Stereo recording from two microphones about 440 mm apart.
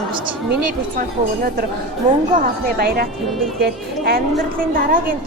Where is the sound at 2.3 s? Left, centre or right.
Centre.